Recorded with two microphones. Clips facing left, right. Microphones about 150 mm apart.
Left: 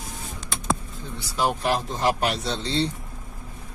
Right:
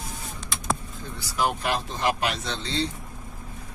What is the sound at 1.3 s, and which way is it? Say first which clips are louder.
Speech: left 2 dB; 30° left (ahead or behind).